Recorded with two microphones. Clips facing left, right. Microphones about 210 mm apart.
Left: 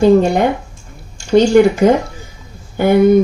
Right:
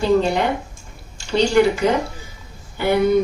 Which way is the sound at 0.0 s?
50° left (ahead or behind).